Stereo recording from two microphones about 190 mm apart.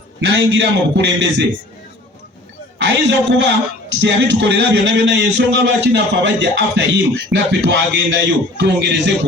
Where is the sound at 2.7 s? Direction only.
70° right (ahead or behind).